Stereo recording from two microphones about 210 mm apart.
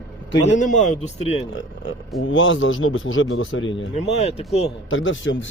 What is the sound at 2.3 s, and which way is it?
Speech, 65° left (ahead or behind).